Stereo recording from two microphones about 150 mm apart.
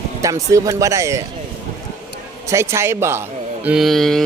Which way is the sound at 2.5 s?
20° right (ahead or behind).